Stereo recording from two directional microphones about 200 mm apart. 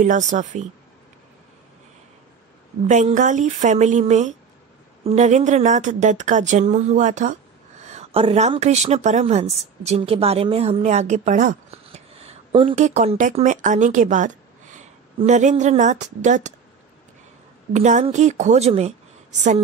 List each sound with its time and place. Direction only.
0.0 s a woman's voice: 40° right (ahead or behind)
2.9 s a woman's voice: 35° right (ahead or behind)
17.7 s a woman's voice: 35° right (ahead or behind)